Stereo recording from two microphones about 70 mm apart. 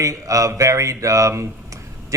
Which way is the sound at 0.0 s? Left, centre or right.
Right.